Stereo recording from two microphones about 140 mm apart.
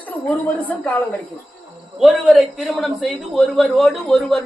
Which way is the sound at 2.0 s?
Centre (ahead or behind).